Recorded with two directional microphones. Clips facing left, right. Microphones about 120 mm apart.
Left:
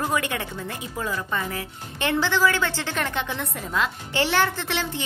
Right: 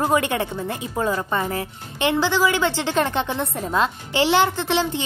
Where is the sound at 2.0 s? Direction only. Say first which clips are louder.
Right 2 dB; 15° right (ahead or behind).